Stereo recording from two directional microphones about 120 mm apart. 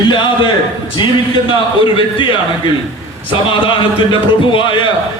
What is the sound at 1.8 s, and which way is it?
Speech, 45° left (ahead or behind).